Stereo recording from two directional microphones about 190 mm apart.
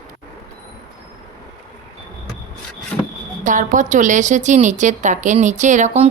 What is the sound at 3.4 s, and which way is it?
A woman's voice, 45° right (ahead or behind).